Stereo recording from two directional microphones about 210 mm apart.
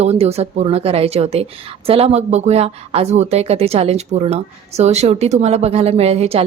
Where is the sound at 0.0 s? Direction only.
30° right (ahead or behind).